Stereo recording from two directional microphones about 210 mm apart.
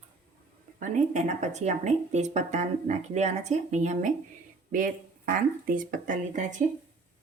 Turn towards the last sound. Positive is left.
turn(degrees=-35)  # may be behind; listen again after turning